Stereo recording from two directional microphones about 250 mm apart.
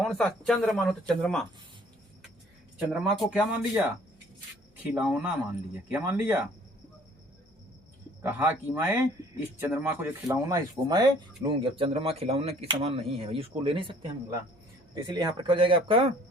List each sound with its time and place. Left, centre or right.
0.0 s speech: centre
2.7 s speech: centre
4.9 s speech: centre
8.2 s speech: centre
14.9 s speech: centre